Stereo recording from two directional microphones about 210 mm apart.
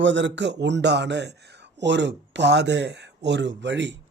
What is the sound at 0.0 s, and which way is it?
Speech, 60° right (ahead or behind).